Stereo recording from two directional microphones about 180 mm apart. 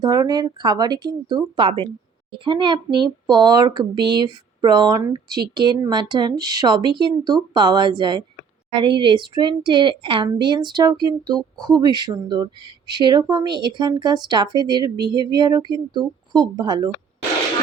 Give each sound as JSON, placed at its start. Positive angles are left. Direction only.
{"t": 0.0, "sound": "speech", "side_deg": -20}